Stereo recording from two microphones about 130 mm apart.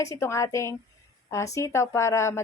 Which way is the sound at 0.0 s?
25° left (ahead or behind).